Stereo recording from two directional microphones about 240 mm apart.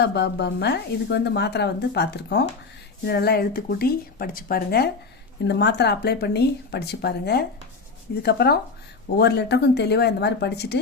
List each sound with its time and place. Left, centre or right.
0.0 s speech: left